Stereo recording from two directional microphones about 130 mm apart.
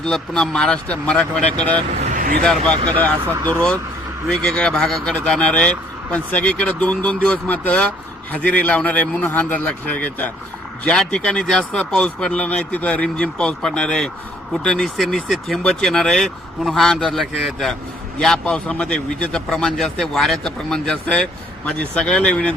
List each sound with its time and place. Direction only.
0.0 s speech: 5° left (ahead or behind)
2.0 s vehicle: 75° right (ahead or behind)
2.4 s speech: 5° left (ahead or behind)
2.7 s speech: 35° right (ahead or behind)
3.0 s speech: 10° left (ahead or behind)